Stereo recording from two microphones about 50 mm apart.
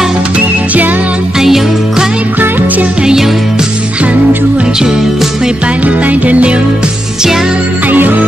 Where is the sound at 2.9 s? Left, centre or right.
Centre.